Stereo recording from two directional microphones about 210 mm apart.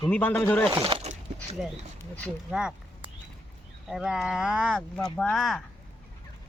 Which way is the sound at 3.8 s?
Centre (ahead or behind).